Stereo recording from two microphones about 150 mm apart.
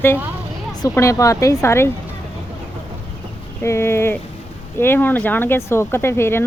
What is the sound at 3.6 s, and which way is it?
Speech, 15° left (ahead or behind).